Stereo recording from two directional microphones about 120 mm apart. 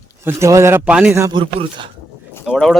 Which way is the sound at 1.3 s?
40° right (ahead or behind).